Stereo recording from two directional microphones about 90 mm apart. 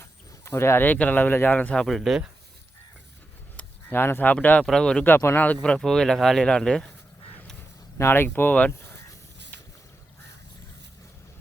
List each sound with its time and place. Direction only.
0.0 s speech: 30° left (ahead or behind); by 1.9 s 15° left (ahead or behind)
1.9 s speech: centre (ahead or behind)
3.6 s speech: 20° left (ahead or behind)
5.0 s speech: 25° left (ahead or behind)
5.6 s speech: 10° left (ahead or behind)
7.9 s speech: 25° left (ahead or behind)